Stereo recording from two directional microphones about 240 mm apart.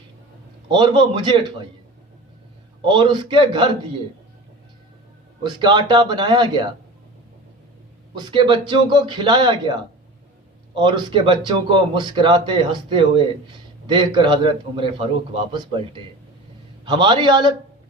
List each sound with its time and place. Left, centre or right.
0.7 s a man's voice: centre
2.8 s a man's voice: centre
5.4 s a man's voice: centre
8.2 s a man's voice: centre
10.8 s a man's voice: centre